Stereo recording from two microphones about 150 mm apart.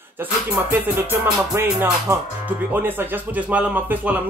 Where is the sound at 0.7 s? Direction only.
15° right (ahead or behind).